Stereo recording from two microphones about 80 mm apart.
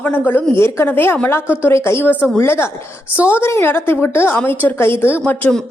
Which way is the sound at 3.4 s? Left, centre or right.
Left.